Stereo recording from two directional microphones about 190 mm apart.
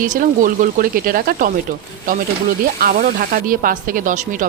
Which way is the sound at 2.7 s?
50° right (ahead or behind).